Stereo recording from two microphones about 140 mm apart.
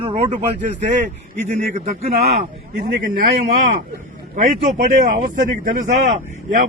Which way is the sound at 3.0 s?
80° right.